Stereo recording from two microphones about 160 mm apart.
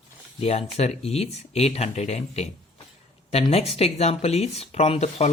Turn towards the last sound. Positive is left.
turn(degrees=40)  # may be behind; listen again after turning